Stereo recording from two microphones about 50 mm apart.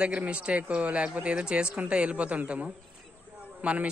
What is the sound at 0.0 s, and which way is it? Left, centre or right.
A woman's voice, right.